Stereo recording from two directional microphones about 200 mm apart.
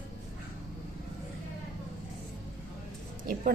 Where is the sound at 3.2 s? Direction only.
45° right (ahead or behind).